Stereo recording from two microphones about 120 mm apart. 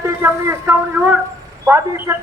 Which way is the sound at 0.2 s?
20° right (ahead or behind).